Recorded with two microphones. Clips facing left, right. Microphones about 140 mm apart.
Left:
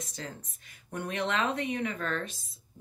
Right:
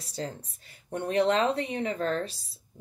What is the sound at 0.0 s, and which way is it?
Speech, 35° right (ahead or behind).